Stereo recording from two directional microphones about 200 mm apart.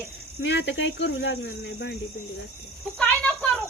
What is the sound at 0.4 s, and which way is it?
Speech, 60° left (ahead or behind).